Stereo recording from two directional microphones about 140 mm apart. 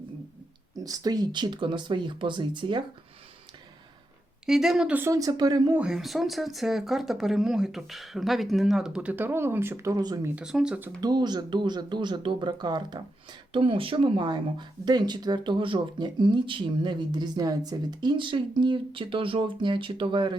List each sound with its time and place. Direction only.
0.8 s speech: 25° right (ahead or behind)
4.4 s speech: centre (ahead or behind)
4.9 s speech: 20° right (ahead or behind)
5.7 s speech: 5° right (ahead or behind); by 10.3 s 25° right (ahead or behind)
10.3 s speech: 5° right (ahead or behind)
11.0 s speech: 30° right (ahead or behind)